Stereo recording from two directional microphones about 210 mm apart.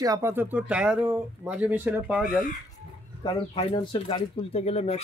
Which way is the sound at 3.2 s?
20° left (ahead or behind).